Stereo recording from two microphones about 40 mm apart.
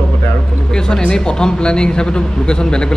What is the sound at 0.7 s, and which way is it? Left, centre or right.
A man's voice, centre.